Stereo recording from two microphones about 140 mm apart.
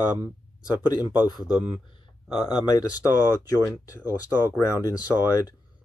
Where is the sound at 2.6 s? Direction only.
30° left (ahead or behind).